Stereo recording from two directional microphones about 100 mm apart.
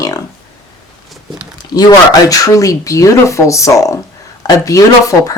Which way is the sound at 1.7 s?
40° left (ahead or behind).